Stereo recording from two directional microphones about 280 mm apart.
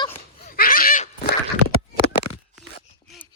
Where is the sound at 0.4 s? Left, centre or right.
Left.